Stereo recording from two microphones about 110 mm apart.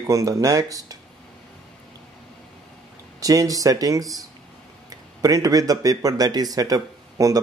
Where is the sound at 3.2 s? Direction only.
30° right (ahead or behind).